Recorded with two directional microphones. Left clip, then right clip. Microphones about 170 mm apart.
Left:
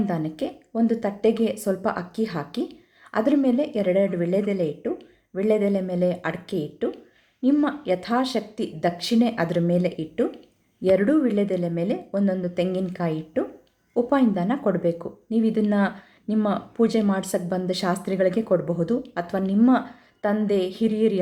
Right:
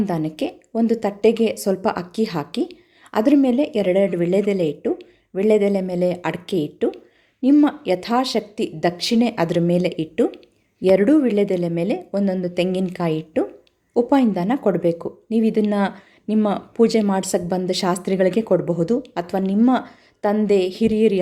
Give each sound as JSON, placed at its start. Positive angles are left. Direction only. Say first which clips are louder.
{"t": 0.0, "sound": "a woman's voice", "louder": "right 4 dB", "side_deg": -35}